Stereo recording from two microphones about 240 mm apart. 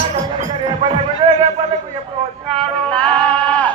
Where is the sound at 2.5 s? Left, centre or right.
Centre.